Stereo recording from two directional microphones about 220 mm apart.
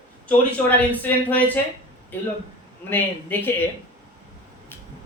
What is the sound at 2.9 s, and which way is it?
Speech, 10° left (ahead or behind).